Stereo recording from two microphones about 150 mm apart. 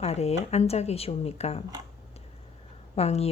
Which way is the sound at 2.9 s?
45° left (ahead or behind).